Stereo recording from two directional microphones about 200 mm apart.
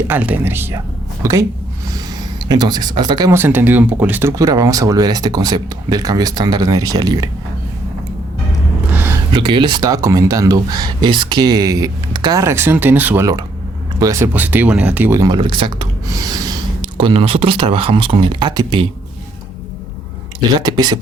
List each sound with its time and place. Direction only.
0.1 s speech: 10° right (ahead or behind)
2.5 s speech: 20° right (ahead or behind)
8.9 s a sound: 10° right (ahead or behind)
9.3 s speech: 25° right (ahead or behind)
20.6 s speech: 20° right (ahead or behind)